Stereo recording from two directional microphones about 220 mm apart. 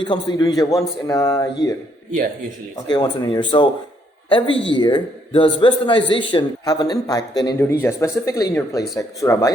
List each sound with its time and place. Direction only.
0.0 s a man's voice: 20° left (ahead or behind)
2.9 s a man's voice: 20° left (ahead or behind)